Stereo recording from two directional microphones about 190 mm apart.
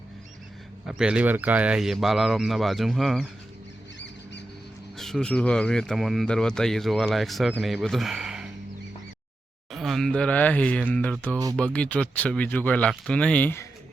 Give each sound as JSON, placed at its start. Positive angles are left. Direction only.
{"t": 0.9, "sound": "speech", "side_deg": -5}
{"t": 4.9, "sound": "speech", "side_deg": 0}
{"t": 9.7, "sound": "speech", "side_deg": 0}